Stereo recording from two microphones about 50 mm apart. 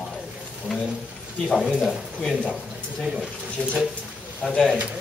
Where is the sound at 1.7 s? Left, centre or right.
Right.